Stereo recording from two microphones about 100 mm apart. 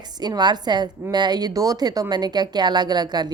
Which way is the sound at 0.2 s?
45° right (ahead or behind).